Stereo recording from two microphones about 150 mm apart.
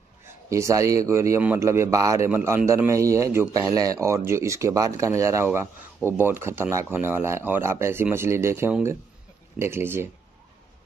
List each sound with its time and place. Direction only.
0.5 s speech: 20° right (ahead or behind)